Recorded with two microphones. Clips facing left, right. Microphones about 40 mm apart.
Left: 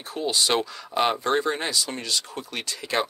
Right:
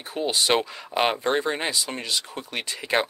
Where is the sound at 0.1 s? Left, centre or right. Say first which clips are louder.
Right 1 dB; right.